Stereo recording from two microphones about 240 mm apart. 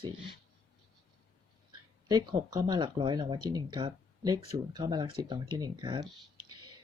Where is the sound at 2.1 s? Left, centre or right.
Centre.